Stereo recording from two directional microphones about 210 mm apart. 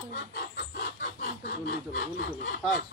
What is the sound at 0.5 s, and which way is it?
Chicken, 50° left (ahead or behind).